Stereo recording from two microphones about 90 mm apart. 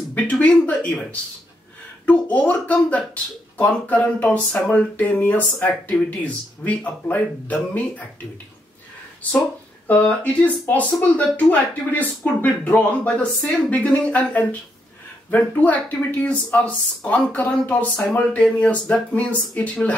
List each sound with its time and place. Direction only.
0.1 s a sound: 15° left (ahead or behind)
2.0 s speech: 15° left (ahead or behind)
9.8 s speech: 15° left (ahead or behind)